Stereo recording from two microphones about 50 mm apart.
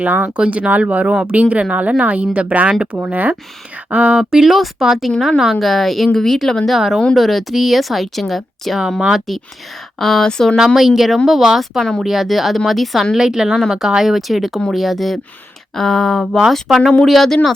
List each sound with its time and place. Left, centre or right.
0.0 s speech: right
3.9 s speech: right
4.2 s a woman's voice: centre
9.0 s speech: centre
10.0 s speech: centre
10.8 s a woman's voice: centre
13.1 s a woman's voice: centre